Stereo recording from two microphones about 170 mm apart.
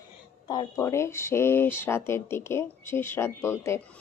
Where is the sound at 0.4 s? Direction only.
25° left (ahead or behind).